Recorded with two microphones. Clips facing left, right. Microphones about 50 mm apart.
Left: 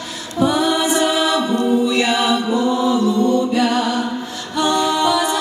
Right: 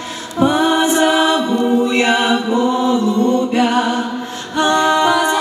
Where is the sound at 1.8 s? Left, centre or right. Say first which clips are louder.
Right 2 dB; right.